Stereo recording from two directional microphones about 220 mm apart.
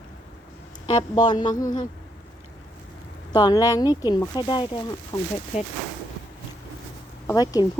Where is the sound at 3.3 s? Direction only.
20° left (ahead or behind).